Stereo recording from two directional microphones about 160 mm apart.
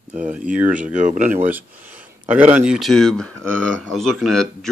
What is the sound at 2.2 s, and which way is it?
Speech, 10° right (ahead or behind).